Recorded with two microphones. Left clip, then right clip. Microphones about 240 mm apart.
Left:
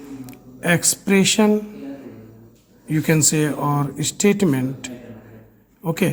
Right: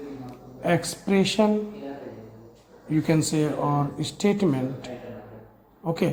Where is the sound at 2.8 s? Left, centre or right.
Left.